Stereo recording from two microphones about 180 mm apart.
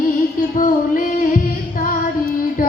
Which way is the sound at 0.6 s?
50° left (ahead or behind).